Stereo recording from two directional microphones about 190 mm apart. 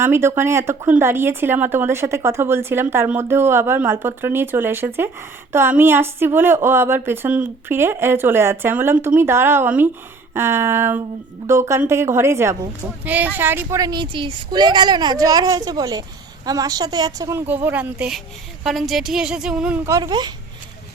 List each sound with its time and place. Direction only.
0.0 s speech: 15° right (ahead or behind)